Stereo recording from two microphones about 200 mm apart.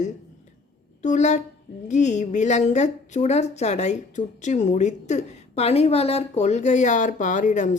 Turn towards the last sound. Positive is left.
turn(degrees=35)  # may be behind; listen again after turning